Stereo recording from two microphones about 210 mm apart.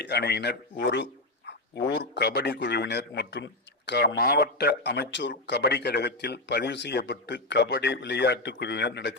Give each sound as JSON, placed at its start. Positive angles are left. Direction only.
{"t": 0.0, "sound": "a man's voice", "side_deg": 50}